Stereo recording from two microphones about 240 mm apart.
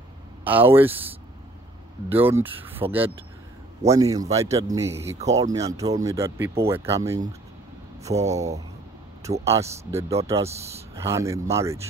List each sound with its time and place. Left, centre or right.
0.4 s speech: centre
8.1 s speech: right
9.5 s speech: centre